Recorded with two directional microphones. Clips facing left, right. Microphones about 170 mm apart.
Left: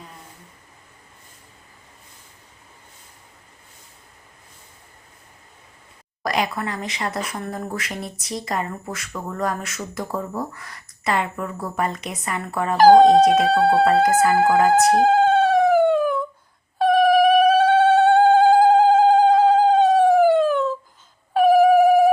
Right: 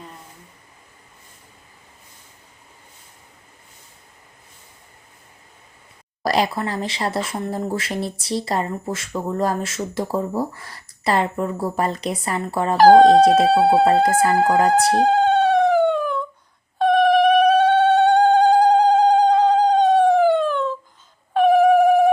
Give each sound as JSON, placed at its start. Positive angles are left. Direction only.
{"t": 6.2, "sound": "speech", "side_deg": -30}
{"t": 12.7, "sound": "speech", "side_deg": 0}
{"t": 13.2, "sound": "speech", "side_deg": -30}
{"t": 13.5, "sound": "speech", "side_deg": 0}
{"t": 14.7, "sound": "music", "side_deg": 5}
{"t": 16.7, "sound": "cat", "side_deg": 5}
{"t": 21.3, "sound": "mosquito", "side_deg": 5}